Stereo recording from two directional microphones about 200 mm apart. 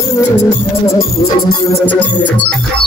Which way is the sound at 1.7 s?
10° left (ahead or behind).